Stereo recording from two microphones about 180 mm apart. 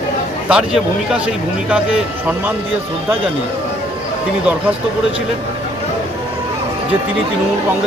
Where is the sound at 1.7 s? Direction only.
5° right (ahead or behind).